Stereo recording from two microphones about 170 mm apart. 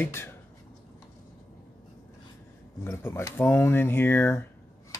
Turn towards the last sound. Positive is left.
turn(degrees=15)  # may be behind; listen again after turning